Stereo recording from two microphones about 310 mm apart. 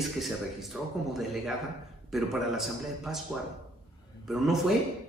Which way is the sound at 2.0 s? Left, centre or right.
Centre.